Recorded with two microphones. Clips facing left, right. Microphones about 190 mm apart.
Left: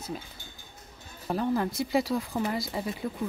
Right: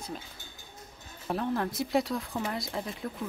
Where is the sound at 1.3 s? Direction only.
Centre (ahead or behind).